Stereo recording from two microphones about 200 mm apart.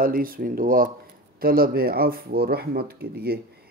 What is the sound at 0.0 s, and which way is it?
Speech, 45° right (ahead or behind).